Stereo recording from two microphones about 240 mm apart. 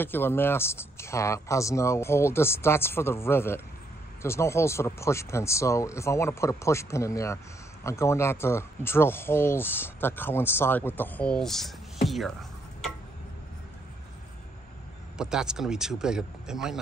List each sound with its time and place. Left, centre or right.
0.0 s speech: centre
15.1 s speech: centre